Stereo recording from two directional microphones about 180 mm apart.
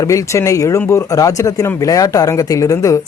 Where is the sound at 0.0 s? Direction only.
20° left (ahead or behind).